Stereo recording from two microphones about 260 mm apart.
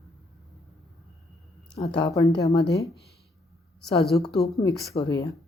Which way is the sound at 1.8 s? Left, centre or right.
Centre.